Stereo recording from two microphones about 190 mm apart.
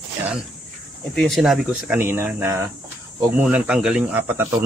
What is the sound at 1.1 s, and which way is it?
Speech, centre (ahead or behind).